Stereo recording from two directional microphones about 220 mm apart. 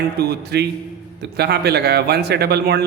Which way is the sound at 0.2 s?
45° right (ahead or behind).